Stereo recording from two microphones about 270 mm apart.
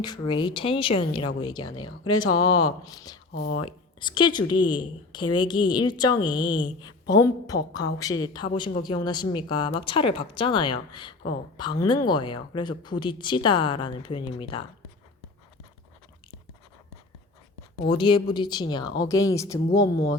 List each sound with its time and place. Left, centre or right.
0.0 s a woman's voice: centre
17.8 s a woman's voice: centre